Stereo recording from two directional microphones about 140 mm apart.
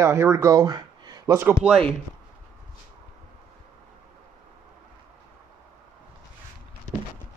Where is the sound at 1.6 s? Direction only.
Centre (ahead or behind).